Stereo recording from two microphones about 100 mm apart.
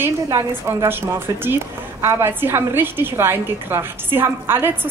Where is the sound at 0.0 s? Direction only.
25° right (ahead or behind).